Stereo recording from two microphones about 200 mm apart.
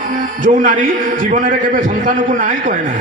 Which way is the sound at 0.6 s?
40° right (ahead or behind).